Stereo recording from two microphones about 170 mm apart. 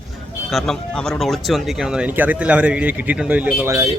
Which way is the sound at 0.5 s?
Centre (ahead or behind).